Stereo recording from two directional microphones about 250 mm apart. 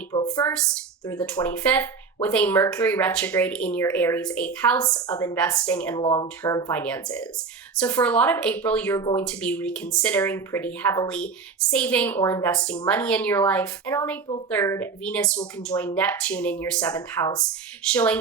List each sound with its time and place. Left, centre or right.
0.3 s speech: centre
6.0 s speech: centre
6.2 s speech: centre